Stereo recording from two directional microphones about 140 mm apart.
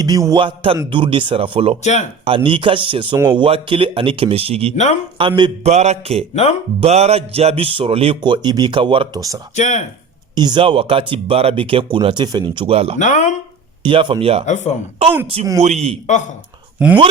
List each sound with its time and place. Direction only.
0.0 s music: 25° right (ahead or behind)
0.4 s speech: 40° right (ahead or behind)
1.8 s speech: 55° left (ahead or behind)
2.2 s speech: 40° right (ahead or behind)
5.6 s mantra: 55° right (ahead or behind)
6.3 s speech: 55° left (ahead or behind)
6.7 s speech: 50° right (ahead or behind)
9.6 s speech: 55° left (ahead or behind)
10.3 s speech: 30° right (ahead or behind)
13.0 s speech: 60° left (ahead or behind)
13.8 s speech: 35° right (ahead or behind)
14.4 s speech: 55° left (ahead or behind)
15.0 s mantra: 45° right (ahead or behind)
16.0 s speech: 60° left (ahead or behind)